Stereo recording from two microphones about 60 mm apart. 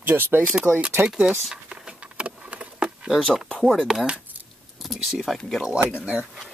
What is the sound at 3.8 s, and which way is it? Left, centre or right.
Speech, centre.